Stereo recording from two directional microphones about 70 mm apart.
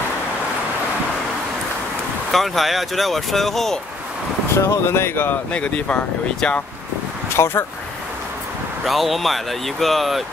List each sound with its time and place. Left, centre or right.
2.3 s speech: centre
4.6 s speech: left
5.5 s speech: centre
7.3 s speech: left
8.8 s speech: centre